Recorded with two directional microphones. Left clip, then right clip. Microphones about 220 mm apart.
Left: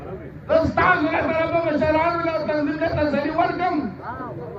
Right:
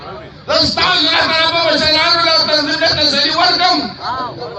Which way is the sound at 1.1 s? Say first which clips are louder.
Right 9 dB; centre (ahead or behind).